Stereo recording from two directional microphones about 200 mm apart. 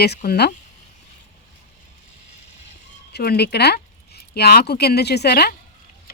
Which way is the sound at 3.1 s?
55° left (ahead or behind).